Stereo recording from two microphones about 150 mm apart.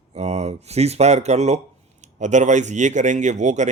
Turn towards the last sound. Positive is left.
turn(degrees=-50)  # may be behind; listen again after turning